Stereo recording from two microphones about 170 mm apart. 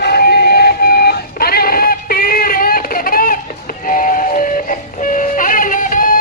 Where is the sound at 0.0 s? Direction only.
70° left (ahead or behind).